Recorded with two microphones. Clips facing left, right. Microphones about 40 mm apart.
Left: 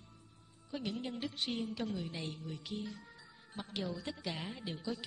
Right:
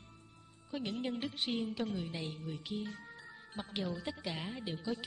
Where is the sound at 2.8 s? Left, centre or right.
Right.